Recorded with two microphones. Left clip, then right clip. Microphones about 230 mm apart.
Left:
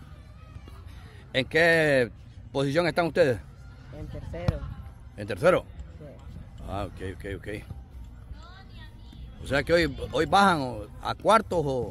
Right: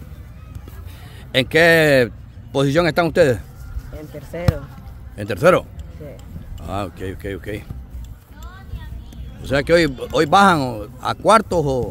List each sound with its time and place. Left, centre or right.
1.3 s speech: centre
4.5 s speech: right
5.1 s speech: centre
9.4 s speech: centre